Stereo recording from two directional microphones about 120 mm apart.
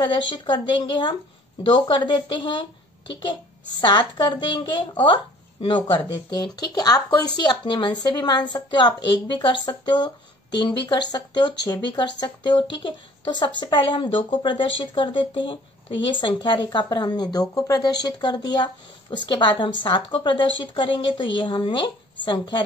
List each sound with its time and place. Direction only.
0.0 s speech: 40° left (ahead or behind)
3.8 s speech: 40° left (ahead or behind)